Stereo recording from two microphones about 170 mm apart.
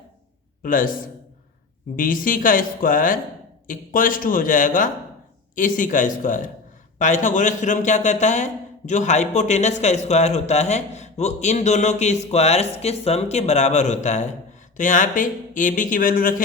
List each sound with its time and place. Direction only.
0.6 s a man's voice: 55° left (ahead or behind)
2.0 s a man's voice: 55° left (ahead or behind)